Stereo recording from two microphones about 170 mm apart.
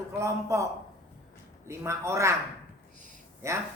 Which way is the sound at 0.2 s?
15° right (ahead or behind).